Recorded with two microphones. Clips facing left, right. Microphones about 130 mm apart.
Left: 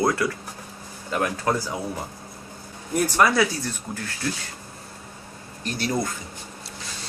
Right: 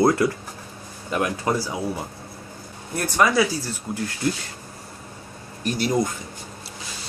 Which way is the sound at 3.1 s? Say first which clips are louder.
Right 2 dB; 5° left (ahead or behind).